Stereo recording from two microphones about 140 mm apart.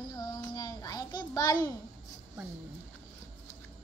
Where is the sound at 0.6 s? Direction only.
25° left (ahead or behind).